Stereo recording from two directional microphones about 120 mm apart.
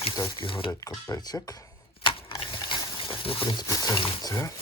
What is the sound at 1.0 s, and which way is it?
Speech, 30° left (ahead or behind).